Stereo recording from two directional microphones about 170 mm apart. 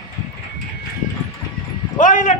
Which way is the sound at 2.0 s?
50° left (ahead or behind).